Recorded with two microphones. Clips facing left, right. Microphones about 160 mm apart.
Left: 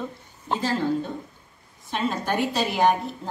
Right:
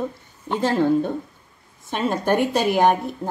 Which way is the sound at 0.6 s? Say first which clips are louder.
Right 7 dB; 55° right (ahead or behind).